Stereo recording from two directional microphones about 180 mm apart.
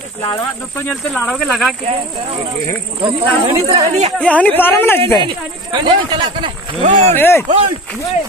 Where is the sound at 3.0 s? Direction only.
25° right (ahead or behind).